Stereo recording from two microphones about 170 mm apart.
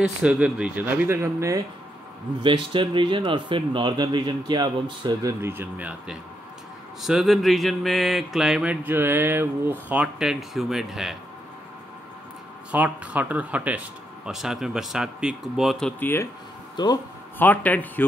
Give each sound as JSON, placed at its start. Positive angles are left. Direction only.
{"t": 0.0, "sound": "speech", "side_deg": -10}
{"t": 2.4, "sound": "speech", "side_deg": -30}
{"t": 5.4, "sound": "speech", "side_deg": -10}
{"t": 7.0, "sound": "mantra", "side_deg": 0}
{"t": 12.7, "sound": "mantra", "side_deg": -10}
{"t": 16.0, "sound": "a man's voice", "side_deg": 15}
{"t": 16.7, "sound": "speech", "side_deg": 25}
{"t": 17.4, "sound": "a man's voice", "side_deg": 10}